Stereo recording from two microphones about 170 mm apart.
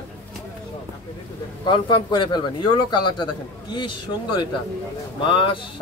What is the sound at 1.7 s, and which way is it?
A man's voice, 25° left (ahead or behind).